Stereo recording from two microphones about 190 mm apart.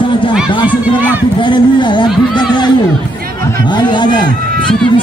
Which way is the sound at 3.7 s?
25° left (ahead or behind).